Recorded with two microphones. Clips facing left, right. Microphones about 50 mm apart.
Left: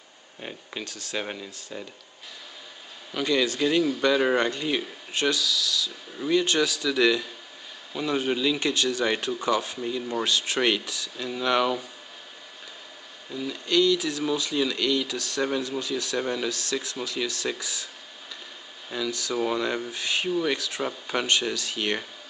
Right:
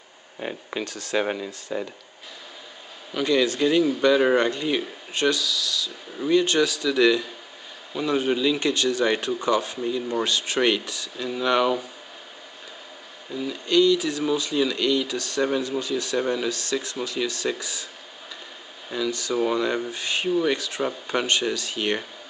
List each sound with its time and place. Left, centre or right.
0.4 s speech: centre
3.1 s speech: centre
13.3 s speech: centre
18.9 s speech: centre